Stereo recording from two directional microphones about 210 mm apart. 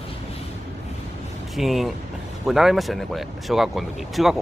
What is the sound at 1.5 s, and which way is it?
Speech, centre (ahead or behind).